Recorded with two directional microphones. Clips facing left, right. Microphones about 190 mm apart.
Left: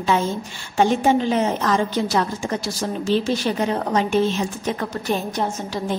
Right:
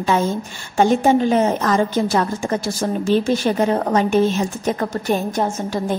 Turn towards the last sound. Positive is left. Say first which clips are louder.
# right 4 dB
turn(degrees=-50)  # may be behind; listen again after turning